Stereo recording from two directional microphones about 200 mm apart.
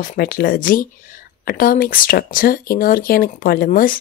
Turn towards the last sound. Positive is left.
turn(degrees=45)  # may be behind; listen again after turning